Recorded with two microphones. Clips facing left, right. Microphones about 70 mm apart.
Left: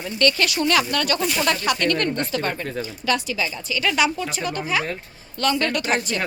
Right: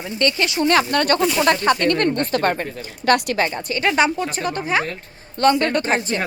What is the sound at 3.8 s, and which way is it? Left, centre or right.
Speech, right.